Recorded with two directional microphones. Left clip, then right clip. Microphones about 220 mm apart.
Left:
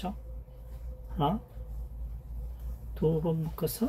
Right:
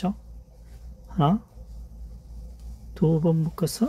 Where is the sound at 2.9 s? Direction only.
55° right (ahead or behind).